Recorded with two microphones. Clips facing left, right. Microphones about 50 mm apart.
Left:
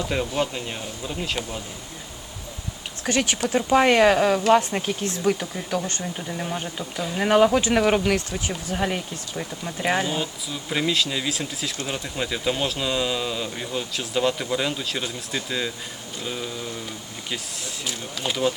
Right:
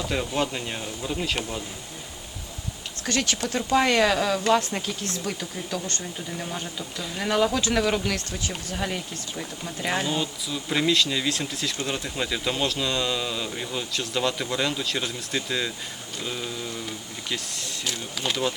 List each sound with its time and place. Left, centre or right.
0.1 s speech: centre
3.1 s speech: centre
6.6 s speech: left
7.0 s speech: centre
7.3 s speech: left
8.3 s speech: centre
10.1 s speech: centre
17.2 s speech: centre